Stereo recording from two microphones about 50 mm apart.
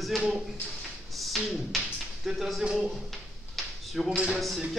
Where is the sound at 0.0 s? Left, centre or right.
Centre.